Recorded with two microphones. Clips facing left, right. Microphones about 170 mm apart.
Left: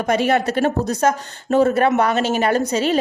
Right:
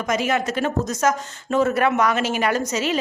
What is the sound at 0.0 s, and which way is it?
A woman's voice, 35° left (ahead or behind).